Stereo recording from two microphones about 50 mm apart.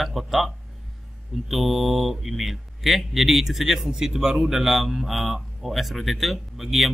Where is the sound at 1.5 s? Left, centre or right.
Centre.